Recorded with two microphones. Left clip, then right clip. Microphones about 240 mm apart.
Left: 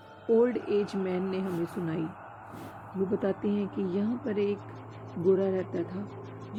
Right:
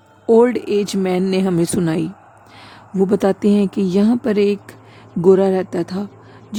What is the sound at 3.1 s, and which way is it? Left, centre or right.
A woman's voice, right.